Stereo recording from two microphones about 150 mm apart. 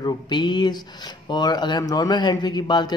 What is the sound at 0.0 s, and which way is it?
A man's voice, 30° left (ahead or behind).